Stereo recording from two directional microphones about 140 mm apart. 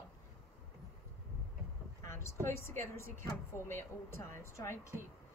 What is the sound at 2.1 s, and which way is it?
A woman's voice, 20° left (ahead or behind).